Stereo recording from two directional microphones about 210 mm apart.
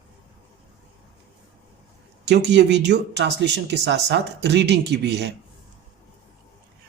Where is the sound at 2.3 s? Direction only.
55° right (ahead or behind).